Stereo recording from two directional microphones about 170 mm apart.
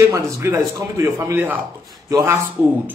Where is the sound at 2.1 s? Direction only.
20° right (ahead or behind).